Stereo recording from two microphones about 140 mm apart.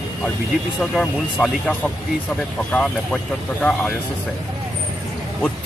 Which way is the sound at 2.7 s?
10° left (ahead or behind).